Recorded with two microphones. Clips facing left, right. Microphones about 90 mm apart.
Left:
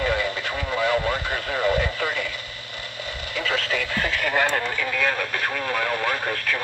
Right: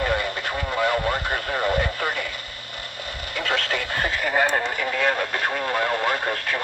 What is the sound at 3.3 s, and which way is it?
Radio, 60° right (ahead or behind).